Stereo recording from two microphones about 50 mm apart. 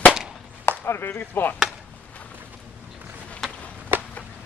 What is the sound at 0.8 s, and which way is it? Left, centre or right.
Speech, left.